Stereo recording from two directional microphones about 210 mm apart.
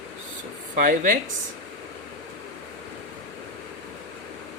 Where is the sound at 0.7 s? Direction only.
40° right (ahead or behind).